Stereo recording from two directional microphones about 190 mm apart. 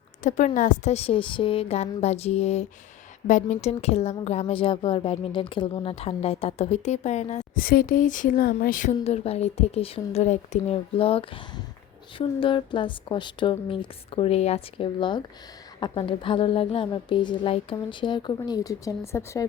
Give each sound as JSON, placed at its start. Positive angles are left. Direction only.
{"t": 0.2, "sound": "a woman's voice", "side_deg": 40}
{"t": 7.6, "sound": "a woman's voice", "side_deg": 50}